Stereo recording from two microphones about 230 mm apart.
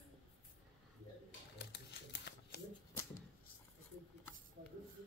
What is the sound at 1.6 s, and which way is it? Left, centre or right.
Typewriter, left.